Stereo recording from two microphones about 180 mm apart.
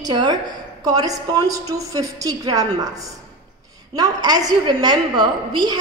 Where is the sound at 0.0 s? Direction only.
25° right (ahead or behind).